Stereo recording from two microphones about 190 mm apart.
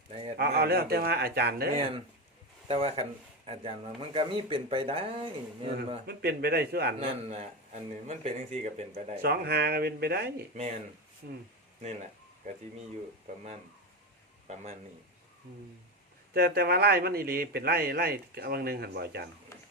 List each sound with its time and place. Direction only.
0.1 s a sound: 30° right (ahead or behind)
0.3 s a man's voice: 60° right (ahead or behind)
1.7 s speech: 30° right (ahead or behind)
6.1 s a man's voice: 55° right (ahead or behind)
7.0 s speech: 30° right (ahead or behind)
9.2 s a man's voice: 55° right (ahead or behind)
10.5 s speech: 40° right (ahead or behind)
16.3 s a man's voice: 55° right (ahead or behind)